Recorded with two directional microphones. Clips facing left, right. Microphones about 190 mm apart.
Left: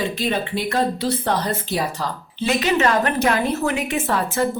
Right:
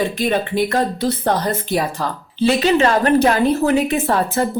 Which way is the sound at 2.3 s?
30° right (ahead or behind).